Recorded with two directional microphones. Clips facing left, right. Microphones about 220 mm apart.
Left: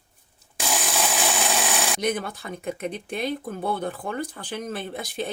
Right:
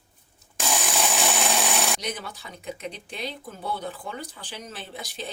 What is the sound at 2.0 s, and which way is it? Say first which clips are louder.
Speech: left 8 dB; 55° left (ahead or behind).